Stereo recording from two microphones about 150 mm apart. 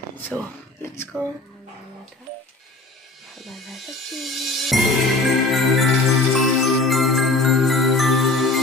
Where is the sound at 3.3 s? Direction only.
Centre (ahead or behind).